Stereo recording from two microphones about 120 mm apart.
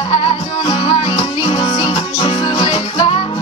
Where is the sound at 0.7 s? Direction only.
45° left (ahead or behind).